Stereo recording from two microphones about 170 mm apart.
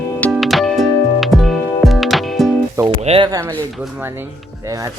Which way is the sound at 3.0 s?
35° right (ahead or behind).